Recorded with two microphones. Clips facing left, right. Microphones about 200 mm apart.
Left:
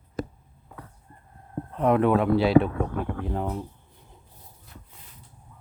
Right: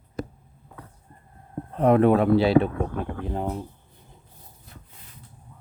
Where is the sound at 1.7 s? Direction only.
35° right (ahead or behind).